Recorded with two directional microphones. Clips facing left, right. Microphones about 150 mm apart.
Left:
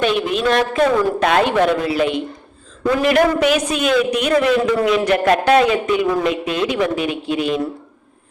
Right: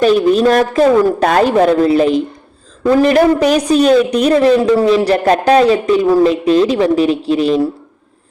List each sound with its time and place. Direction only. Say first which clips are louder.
0.0 s a woman's voice: right 8 dB; 40° right (ahead or behind)